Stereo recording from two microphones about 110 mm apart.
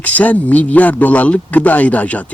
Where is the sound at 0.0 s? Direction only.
15° left (ahead or behind).